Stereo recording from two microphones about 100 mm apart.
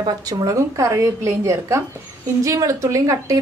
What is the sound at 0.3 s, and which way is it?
A woman's voice, 35° right (ahead or behind).